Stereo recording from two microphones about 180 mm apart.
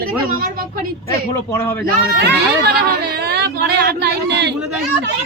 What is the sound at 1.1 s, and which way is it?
Speech, 15° left (ahead or behind).